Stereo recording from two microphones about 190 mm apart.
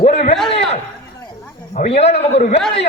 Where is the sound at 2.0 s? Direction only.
35° left (ahead or behind).